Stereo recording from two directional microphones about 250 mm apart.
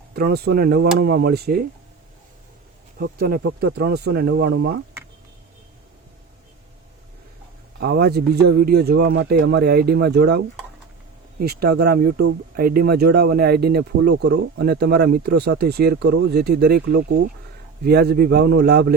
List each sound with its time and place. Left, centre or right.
0.1 s speech: right
3.0 s speech: right
7.8 s speech: right